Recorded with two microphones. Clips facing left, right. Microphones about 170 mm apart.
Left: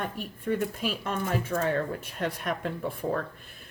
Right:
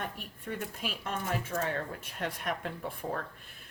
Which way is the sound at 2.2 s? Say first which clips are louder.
Left 4 dB; 40° left (ahead or behind).